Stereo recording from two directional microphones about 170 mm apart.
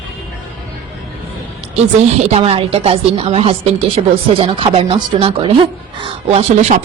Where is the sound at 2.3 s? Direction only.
35° right (ahead or behind).